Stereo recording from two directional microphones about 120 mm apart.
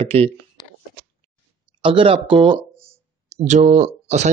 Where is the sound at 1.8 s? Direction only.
45° right (ahead or behind).